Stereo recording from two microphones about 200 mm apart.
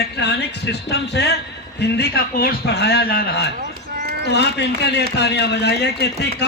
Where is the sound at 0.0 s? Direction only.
55° left (ahead or behind).